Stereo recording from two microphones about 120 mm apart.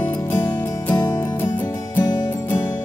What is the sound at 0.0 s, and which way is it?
Music, 20° left (ahead or behind).